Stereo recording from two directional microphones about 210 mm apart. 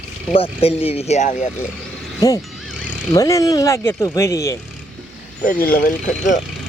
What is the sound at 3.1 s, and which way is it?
Speech, 15° left (ahead or behind).